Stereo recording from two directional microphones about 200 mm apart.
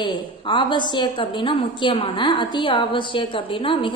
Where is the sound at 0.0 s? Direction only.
25° left (ahead or behind).